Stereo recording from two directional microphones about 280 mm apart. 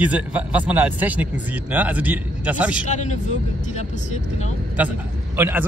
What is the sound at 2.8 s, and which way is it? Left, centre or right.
Speech, left.